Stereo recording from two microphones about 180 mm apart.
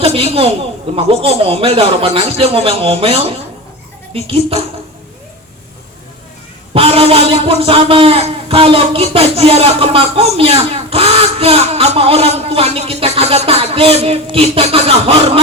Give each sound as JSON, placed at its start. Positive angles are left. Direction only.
{"t": 0.0, "sound": "a man's voice", "side_deg": -35}
{"t": 6.7, "sound": "a man's voice", "side_deg": -35}